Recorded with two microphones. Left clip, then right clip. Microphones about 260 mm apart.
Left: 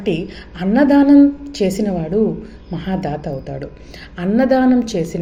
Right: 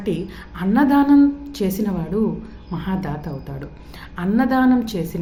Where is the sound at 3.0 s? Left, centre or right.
Right.